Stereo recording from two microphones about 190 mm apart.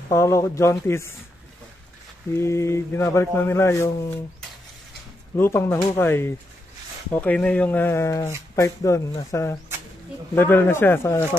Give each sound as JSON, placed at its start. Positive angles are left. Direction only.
{"t": 0.1, "sound": "speech", "side_deg": 15}
{"t": 2.3, "sound": "speech", "side_deg": 15}
{"t": 5.3, "sound": "speech", "side_deg": 15}